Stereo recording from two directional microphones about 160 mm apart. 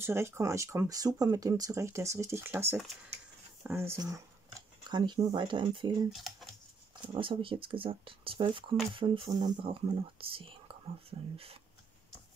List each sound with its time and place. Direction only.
0.0 s speech: 15° right (ahead or behind)
6.0 s speech: centre (ahead or behind)
7.1 s speech: 35° right (ahead or behind)